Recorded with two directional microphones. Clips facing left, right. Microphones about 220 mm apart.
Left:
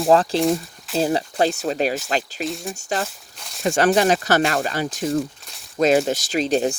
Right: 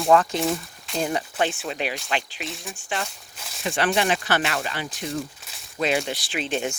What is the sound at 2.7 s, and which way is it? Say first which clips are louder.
Speech: left 5 dB; 40° left (ahead or behind).